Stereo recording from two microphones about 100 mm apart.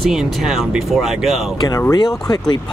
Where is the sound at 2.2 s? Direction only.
40° left (ahead or behind).